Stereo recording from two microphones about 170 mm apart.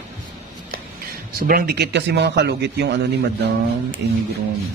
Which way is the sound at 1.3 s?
65° right (ahead or behind).